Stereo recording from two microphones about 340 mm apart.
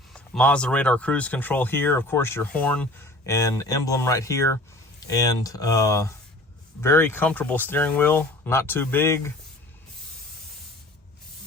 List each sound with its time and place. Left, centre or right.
0.1 s speech: centre